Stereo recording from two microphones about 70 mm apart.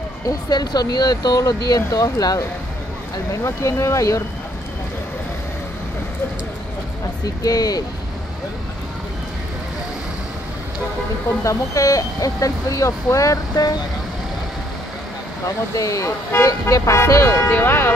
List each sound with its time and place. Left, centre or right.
0.3 s speech: left
1.9 s speech: left
3.4 s speech: left
7.4 s speech: left
11.4 s speech: left
15.4 s speech: left
17.5 s speech: left